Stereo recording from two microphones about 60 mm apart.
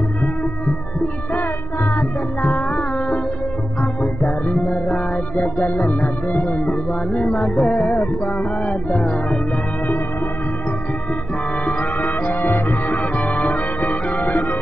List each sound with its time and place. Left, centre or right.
0.2 s music: centre
2.4 s music: centre
11.8 s music: left
12.4 s music: left
12.6 s music: left
13.0 s music: centre